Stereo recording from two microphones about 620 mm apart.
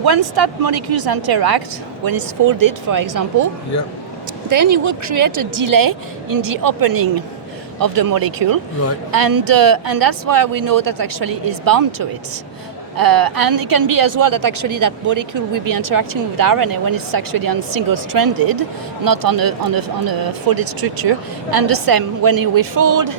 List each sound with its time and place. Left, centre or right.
0.0 s a woman's voice: right